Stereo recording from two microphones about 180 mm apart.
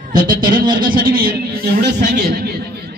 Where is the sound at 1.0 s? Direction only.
55° right (ahead or behind).